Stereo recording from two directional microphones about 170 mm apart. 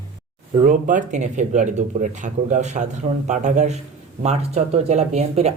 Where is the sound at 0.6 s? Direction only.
50° right (ahead or behind).